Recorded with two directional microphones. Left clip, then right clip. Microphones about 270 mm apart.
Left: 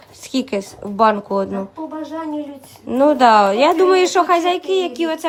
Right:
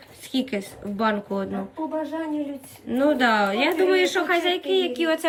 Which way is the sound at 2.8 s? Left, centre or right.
Centre.